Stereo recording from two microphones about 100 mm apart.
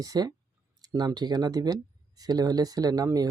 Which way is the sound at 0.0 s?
40° right (ahead or behind).